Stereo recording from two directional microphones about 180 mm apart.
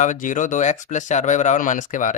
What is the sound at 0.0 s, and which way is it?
Speech, 45° left (ahead or behind).